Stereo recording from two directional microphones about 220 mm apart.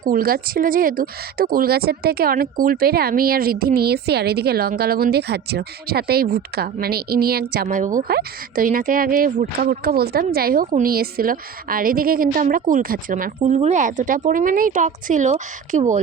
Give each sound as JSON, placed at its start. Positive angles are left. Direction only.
{"t": 0.0, "sound": "a woman's voice", "side_deg": -40}